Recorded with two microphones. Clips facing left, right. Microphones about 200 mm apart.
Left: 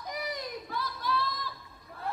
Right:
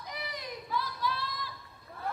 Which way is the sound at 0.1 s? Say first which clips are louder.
Left 4 dB; 45° left (ahead or behind).